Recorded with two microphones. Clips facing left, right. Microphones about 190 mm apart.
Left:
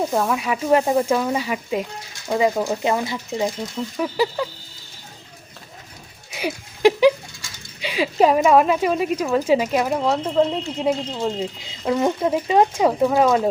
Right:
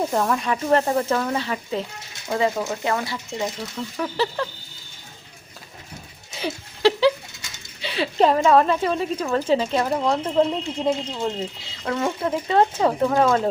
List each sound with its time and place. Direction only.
0.1 s speech: 5° left (ahead or behind)
6.8 s goat: 15° left (ahead or behind)
7.8 s speech: 10° left (ahead or behind)
11.9 s speech: 20° left (ahead or behind)